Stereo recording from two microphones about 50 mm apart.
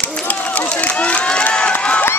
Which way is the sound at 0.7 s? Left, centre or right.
Left.